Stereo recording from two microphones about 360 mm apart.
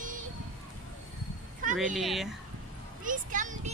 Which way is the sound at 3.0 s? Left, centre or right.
Right.